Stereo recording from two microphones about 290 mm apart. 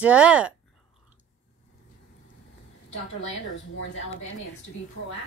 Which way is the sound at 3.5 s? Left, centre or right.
Left.